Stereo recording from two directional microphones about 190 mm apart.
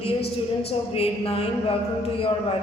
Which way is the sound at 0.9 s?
30° left (ahead or behind).